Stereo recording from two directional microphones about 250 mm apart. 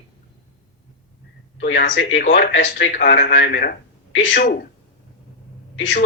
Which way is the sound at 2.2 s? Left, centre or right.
Left.